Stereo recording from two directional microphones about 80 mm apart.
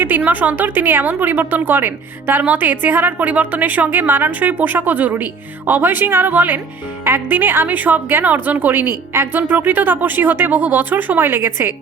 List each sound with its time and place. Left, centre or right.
0.3 s a woman's voice: right